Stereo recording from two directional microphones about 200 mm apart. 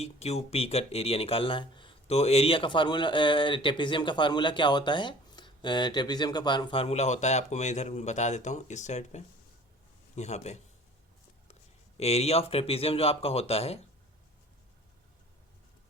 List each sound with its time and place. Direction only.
0.0 s a man's voice: 30° left (ahead or behind)
11.9 s speech: 30° left (ahead or behind)